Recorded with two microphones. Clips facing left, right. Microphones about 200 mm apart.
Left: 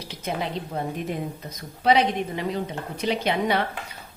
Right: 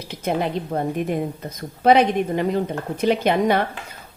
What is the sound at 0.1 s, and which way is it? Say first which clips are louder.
A woman's voice: right 6 dB; 55° right (ahead or behind).